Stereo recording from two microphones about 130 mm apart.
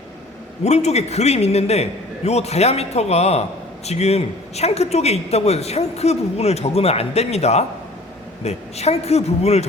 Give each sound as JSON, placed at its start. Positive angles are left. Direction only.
{"t": 0.6, "sound": "a man's voice", "side_deg": 55}